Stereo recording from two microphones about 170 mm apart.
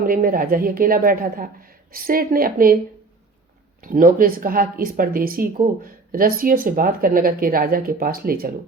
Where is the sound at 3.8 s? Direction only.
55° right (ahead or behind).